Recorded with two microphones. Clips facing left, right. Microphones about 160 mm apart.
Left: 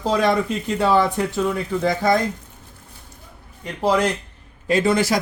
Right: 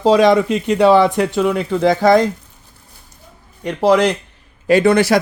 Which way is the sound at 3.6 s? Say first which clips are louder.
Right 6 dB; 75° right (ahead or behind).